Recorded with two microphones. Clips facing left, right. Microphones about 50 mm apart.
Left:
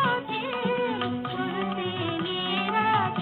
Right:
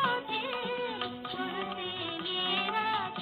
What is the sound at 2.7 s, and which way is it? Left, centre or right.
Music, left.